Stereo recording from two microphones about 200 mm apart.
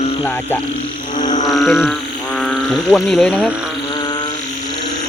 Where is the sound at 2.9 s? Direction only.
Centre (ahead or behind).